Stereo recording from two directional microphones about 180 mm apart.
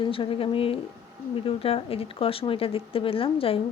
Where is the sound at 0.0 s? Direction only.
30° left (ahead or behind).